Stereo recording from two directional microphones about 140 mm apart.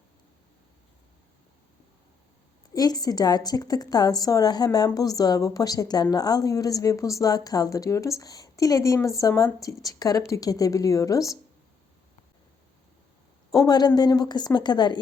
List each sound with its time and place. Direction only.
2.7 s a woman's voice: 25° left (ahead or behind)
13.5 s a woman's voice: 30° left (ahead or behind)